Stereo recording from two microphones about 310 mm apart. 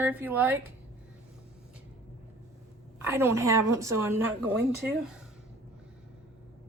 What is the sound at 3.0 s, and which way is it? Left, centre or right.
A woman's voice, centre.